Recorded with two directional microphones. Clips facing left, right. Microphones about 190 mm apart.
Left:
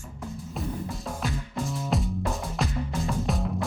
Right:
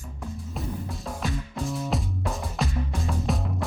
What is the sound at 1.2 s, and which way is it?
Music, centre (ahead or behind).